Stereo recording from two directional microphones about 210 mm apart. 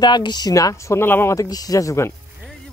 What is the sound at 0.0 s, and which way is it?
Speech, 20° left (ahead or behind).